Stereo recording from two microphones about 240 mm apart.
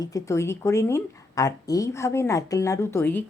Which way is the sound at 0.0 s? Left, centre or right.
Centre.